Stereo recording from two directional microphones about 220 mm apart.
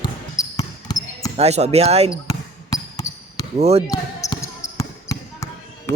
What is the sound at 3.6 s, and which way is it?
Speech, 30° right (ahead or behind).